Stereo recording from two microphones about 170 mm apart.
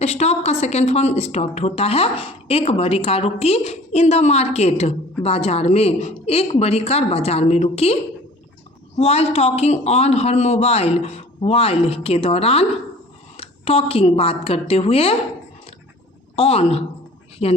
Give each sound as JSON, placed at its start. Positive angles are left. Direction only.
{"t": 0.0, "sound": "speech", "side_deg": 40}
{"t": 9.0, "sound": "speech", "side_deg": 35}
{"t": 16.3, "sound": "speech", "side_deg": 35}